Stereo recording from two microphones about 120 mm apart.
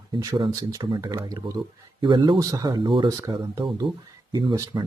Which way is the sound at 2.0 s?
40° right (ahead or behind).